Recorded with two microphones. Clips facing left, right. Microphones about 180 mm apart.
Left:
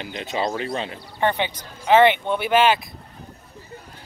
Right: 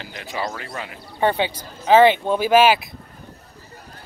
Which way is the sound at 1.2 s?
15° right (ahead or behind).